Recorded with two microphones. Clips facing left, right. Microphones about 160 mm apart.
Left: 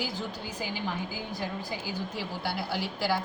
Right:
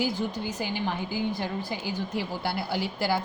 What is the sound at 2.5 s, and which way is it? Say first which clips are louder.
Speech: even; 60° right (ahead or behind).